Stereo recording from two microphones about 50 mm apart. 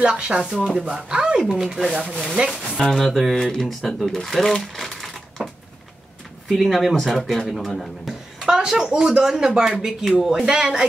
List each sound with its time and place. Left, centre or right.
0.0 s speech: centre
2.9 s speech: centre
6.5 s speech: centre
8.5 s speech: centre